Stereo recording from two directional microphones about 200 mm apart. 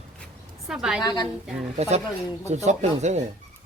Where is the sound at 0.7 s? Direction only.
5° right (ahead or behind).